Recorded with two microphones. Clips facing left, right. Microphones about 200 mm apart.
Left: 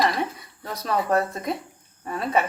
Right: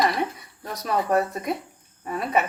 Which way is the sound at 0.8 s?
15° right (ahead or behind).